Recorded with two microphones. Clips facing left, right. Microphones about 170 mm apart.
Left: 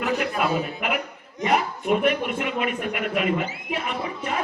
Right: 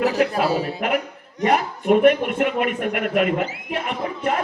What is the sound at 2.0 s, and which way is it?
Speech, 50° right (ahead or behind).